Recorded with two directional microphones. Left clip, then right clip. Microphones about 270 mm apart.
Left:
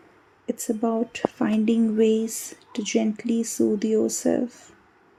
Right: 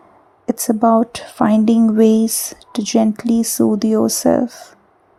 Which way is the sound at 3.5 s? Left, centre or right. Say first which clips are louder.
Right 4 dB; right.